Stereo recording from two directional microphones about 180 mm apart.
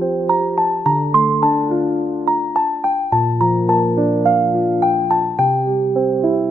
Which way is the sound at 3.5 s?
Centre (ahead or behind).